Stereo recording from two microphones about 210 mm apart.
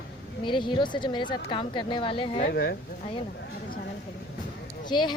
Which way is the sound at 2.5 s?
55° left (ahead or behind).